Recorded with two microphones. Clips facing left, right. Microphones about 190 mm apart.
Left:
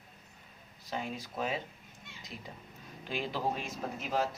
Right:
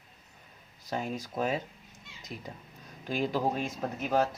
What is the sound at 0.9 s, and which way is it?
Speech, 45° right (ahead or behind).